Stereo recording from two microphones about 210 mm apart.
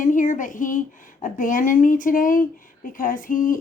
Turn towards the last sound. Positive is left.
turn(degrees=40)  # may be behind; listen again after turning